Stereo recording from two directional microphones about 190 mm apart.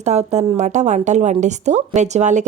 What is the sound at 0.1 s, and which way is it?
A woman's voice, 35° right (ahead or behind).